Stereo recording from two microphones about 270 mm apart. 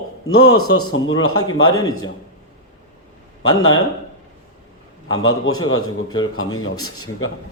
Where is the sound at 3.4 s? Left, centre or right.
Left.